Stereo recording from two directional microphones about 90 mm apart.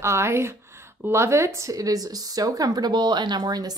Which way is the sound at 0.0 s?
30° right (ahead or behind).